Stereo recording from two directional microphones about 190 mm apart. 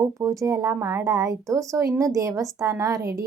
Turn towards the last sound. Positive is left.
turn(degrees=-15)  # may be behind; listen again after turning